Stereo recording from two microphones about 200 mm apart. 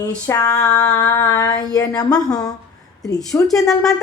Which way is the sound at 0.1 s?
10° left (ahead or behind).